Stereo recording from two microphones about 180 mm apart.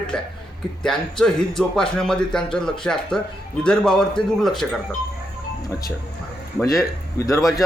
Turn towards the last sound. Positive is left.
turn(degrees=0)  # may be behind; listen again after turning